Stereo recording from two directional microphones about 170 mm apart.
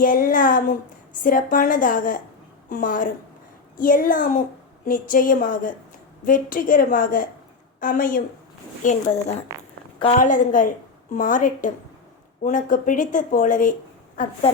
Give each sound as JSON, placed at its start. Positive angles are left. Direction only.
{"t": 0.0, "sound": "a woman's voice", "side_deg": 55}
{"t": 9.5, "sound": "a sound", "side_deg": -20}
{"t": 10.2, "sound": "a woman's voice", "side_deg": 50}